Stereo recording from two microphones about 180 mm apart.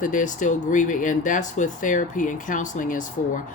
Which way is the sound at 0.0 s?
45° left (ahead or behind).